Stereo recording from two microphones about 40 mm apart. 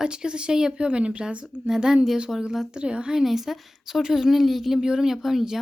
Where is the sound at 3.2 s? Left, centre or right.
Centre.